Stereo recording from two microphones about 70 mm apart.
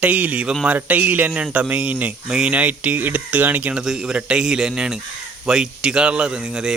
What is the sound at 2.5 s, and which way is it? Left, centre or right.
Speech, right.